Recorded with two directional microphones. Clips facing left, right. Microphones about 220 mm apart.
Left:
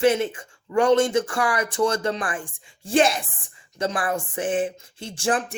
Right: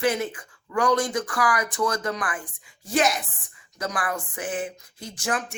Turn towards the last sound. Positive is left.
turn(degrees=30)  # may be behind; listen again after turning